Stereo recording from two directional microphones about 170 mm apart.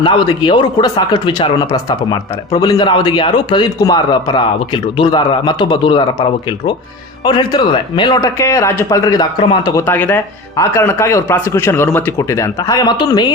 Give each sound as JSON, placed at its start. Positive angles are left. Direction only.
{"t": 0.0, "sound": "speech", "side_deg": 30}
{"t": 7.3, "sound": "speech", "side_deg": 25}
{"t": 9.8, "sound": "speech", "side_deg": 10}